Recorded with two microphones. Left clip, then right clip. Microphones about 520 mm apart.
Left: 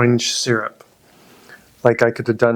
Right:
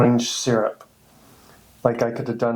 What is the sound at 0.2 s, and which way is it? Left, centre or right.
Speech, left.